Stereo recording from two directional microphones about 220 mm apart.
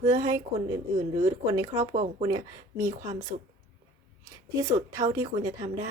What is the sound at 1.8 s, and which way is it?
Speech, 30° right (ahead or behind).